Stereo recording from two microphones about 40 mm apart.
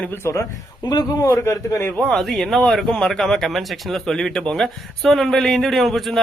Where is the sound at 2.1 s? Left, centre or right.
Centre.